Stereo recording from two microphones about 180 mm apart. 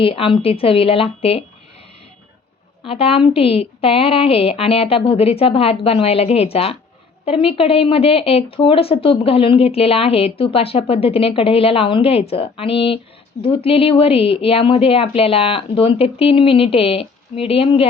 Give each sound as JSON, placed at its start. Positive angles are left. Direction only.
{"t": 0.0, "sound": "speech", "side_deg": 30}
{"t": 2.8, "sound": "speech", "side_deg": 30}